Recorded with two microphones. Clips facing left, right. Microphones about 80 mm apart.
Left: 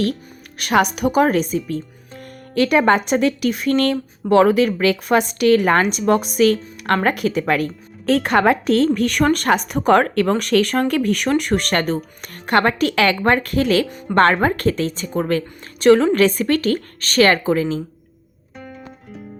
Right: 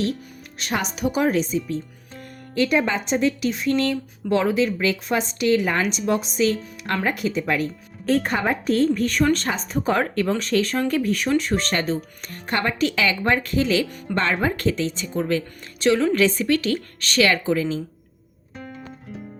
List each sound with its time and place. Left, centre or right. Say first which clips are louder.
0.6 s a woman's voice: left 8 dB; left
2.6 s a woman's voice: left 6 dB; left
9.2 s a woman's voice: left 6 dB; left
18.5 s music: left 1 dB; centre